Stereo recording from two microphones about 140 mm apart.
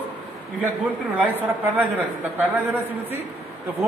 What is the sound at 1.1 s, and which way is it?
A man's voice, 10° right (ahead or behind).